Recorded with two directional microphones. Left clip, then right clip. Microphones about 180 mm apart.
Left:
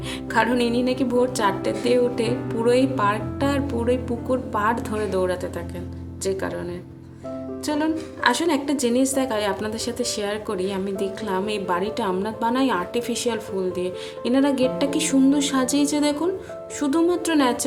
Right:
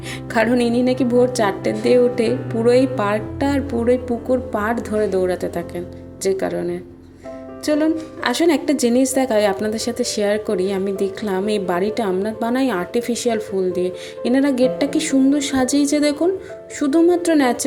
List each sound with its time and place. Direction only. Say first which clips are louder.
0.3 s a woman's voice: right 3 dB; 15° right (ahead or behind)